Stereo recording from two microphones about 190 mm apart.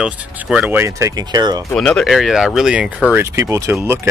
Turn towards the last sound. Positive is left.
turn(degrees=-10)  # may be behind; listen again after turning